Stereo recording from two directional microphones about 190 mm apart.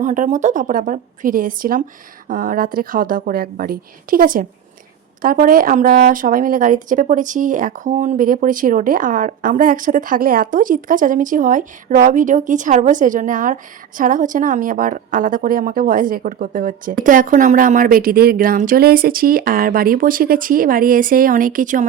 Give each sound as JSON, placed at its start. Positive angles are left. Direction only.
{"t": 0.0, "sound": "a woman's voice", "side_deg": -40}